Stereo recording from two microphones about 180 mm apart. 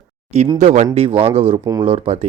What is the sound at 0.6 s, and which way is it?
A man's voice, 40° right (ahead or behind).